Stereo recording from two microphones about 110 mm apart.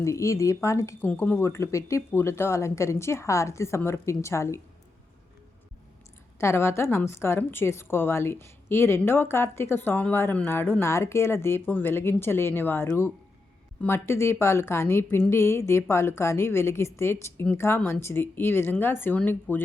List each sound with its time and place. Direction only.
0.0 s a woman's voice: 30° left (ahead or behind)
1.0 s a woman's voice: 15° left (ahead or behind)
6.4 s a woman's voice: 25° left (ahead or behind)